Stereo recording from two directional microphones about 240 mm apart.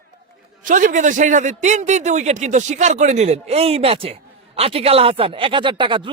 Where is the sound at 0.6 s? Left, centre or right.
Right.